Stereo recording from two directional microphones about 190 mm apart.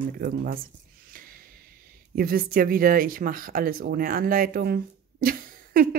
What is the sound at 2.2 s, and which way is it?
Speech, 50° right (ahead or behind).